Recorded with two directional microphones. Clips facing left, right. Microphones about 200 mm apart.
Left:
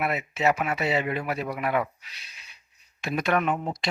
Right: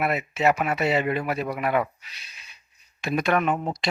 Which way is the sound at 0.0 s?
50° right (ahead or behind).